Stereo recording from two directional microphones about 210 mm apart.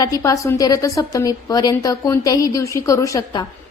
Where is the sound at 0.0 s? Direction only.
15° left (ahead or behind).